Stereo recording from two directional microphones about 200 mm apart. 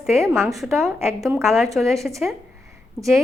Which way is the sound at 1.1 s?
15° right (ahead or behind).